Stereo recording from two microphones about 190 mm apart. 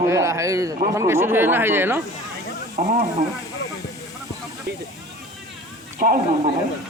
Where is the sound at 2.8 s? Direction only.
45° right (ahead or behind).